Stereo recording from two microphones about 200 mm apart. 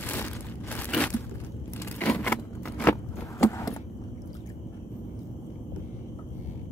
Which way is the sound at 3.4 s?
15° left (ahead or behind).